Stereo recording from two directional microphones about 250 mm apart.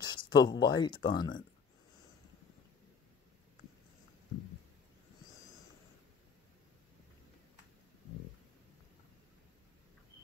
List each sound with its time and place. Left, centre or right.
0.0 s speech: centre